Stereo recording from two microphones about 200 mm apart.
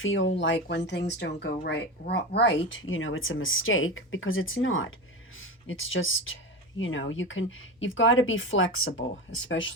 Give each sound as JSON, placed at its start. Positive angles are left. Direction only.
{"t": 0.0, "sound": "speech", "side_deg": 75}